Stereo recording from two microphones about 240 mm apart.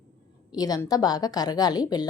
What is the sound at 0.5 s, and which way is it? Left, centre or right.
Speech, centre.